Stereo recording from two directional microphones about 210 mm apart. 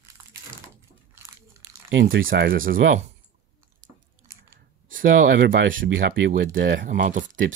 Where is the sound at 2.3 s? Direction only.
45° right (ahead or behind).